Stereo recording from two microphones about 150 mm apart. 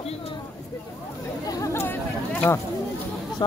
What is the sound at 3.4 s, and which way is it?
Speech, 30° left (ahead or behind).